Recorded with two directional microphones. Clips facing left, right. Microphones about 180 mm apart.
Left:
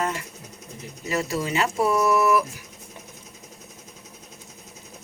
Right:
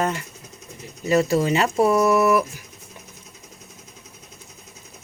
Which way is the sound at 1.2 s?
25° right (ahead or behind).